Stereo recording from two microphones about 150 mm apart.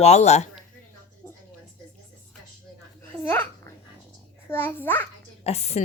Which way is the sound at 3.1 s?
10° left (ahead or behind).